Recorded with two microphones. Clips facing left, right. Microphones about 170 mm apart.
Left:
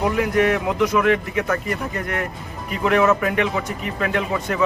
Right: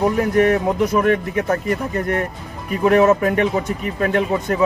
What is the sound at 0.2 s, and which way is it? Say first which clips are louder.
A man's voice: right 3 dB; 40° right (ahead or behind).